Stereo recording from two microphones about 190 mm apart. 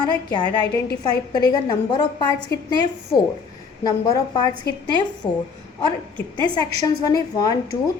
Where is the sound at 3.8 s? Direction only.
20° left (ahead or behind).